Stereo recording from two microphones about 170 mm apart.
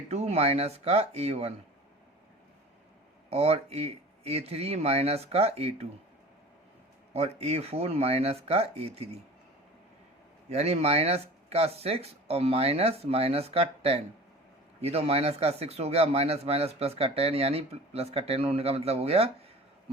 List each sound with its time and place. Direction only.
0.1 s speech: 40° right (ahead or behind)
3.2 s speech: 40° right (ahead or behind)
7.1 s speech: 40° right (ahead or behind)
10.5 s speech: 40° right (ahead or behind)